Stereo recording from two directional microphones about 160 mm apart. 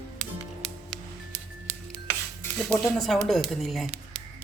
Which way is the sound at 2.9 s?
Centre (ahead or behind).